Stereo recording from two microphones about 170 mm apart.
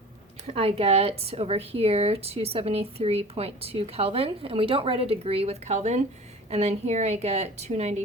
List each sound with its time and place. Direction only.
0.4 s speech: 35° right (ahead or behind)